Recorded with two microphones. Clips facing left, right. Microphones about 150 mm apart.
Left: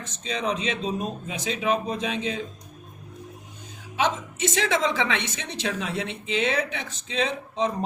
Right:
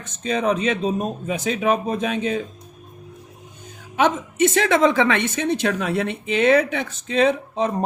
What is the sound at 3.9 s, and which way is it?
A woman's voice, 55° right (ahead or behind).